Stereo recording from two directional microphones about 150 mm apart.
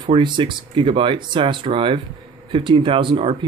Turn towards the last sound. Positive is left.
turn(degrees=-35)  # may be behind; listen again after turning